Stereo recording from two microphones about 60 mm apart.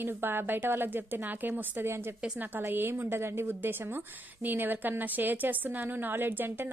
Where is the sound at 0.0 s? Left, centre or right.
Right.